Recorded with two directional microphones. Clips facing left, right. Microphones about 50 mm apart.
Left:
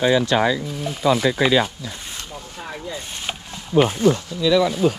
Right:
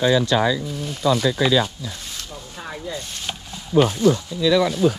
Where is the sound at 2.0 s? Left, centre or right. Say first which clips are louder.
Left 1 dB; left.